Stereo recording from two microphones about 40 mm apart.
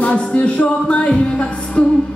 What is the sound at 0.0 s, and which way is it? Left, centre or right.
Music, left.